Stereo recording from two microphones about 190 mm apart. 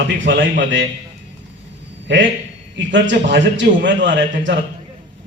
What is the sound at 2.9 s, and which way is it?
Speech, 70° right (ahead or behind).